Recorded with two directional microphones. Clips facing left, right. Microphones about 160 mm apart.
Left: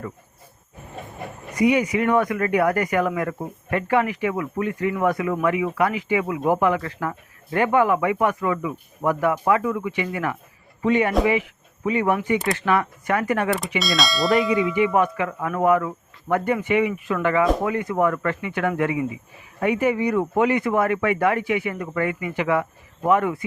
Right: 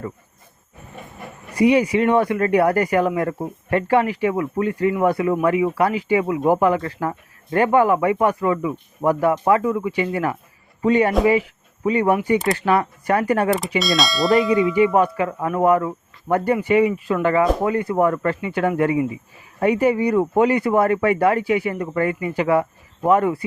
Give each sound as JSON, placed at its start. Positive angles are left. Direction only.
{"t": 1.5, "sound": "speech", "side_deg": -30}
{"t": 13.7, "sound": "bell", "side_deg": 0}
{"t": 14.9, "sound": "speech", "side_deg": -30}